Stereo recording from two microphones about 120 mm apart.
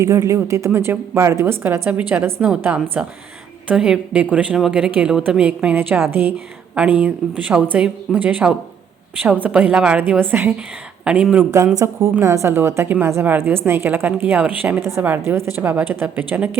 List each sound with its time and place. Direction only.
0.0 s a woman's voice: 25° right (ahead or behind); by 11.4 s 10° right (ahead or behind)
11.5 s a woman's voice: 30° right (ahead or behind)